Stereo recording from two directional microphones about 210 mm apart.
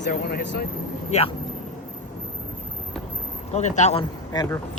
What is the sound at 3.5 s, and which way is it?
Speech, 35° left (ahead or behind).